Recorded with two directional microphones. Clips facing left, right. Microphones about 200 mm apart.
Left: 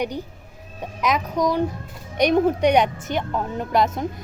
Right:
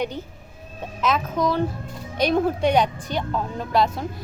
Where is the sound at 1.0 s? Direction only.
15° left (ahead or behind).